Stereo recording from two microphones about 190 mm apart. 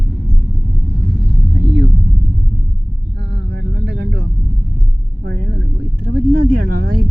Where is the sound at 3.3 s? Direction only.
65° right (ahead or behind).